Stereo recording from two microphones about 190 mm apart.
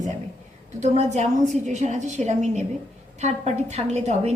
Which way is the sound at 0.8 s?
35° right (ahead or behind).